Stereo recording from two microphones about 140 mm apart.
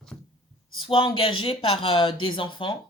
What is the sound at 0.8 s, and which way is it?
Speech, 40° left (ahead or behind).